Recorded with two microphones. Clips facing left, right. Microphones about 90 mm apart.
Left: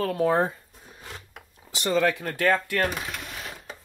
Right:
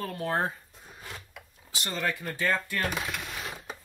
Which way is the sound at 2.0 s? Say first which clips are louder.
Left 7 dB; 90° left.